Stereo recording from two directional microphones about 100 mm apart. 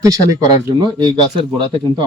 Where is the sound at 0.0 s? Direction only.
35° right (ahead or behind).